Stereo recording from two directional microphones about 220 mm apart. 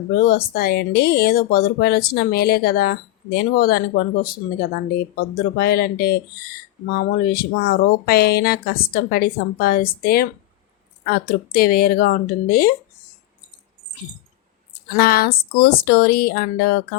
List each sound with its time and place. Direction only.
0.2 s speech: 45° left (ahead or behind)
5.5 s speech: 45° left (ahead or behind)
14.9 s speech: 45° left (ahead or behind)